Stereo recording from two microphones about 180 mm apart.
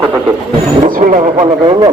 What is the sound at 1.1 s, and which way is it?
Speech, 30° right (ahead or behind).